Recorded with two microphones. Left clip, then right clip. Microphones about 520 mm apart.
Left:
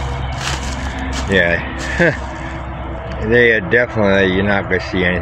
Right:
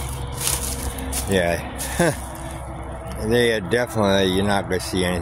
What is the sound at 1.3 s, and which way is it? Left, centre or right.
Vehicle, right.